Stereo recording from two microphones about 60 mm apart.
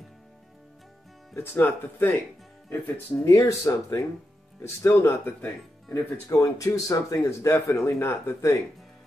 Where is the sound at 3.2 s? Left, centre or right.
Left.